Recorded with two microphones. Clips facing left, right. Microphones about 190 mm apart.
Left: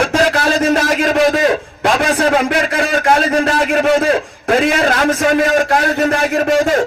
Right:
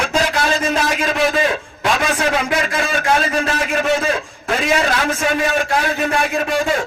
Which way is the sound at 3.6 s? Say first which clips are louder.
Left 5 dB; 60° left (ahead or behind).